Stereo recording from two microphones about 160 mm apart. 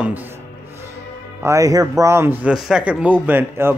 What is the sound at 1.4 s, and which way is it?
Speech, 20° right (ahead or behind).